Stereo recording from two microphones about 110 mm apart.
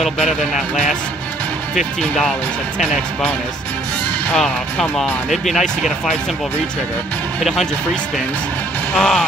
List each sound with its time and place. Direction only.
1.8 s speech: centre (ahead or behind)
4.4 s speech: 5° left (ahead or behind)
7.4 s speech: centre (ahead or behind)